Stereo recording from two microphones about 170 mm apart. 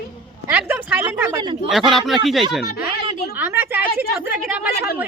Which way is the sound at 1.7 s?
Centre (ahead or behind).